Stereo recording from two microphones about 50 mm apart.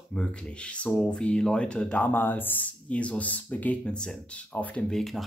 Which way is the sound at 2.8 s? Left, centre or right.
Left.